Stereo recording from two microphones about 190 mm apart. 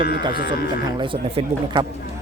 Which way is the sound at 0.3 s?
55° left (ahead or behind).